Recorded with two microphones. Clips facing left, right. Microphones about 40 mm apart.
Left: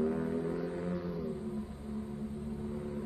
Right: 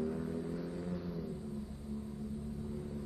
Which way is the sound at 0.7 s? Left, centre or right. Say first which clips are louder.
Left 4 dB; left.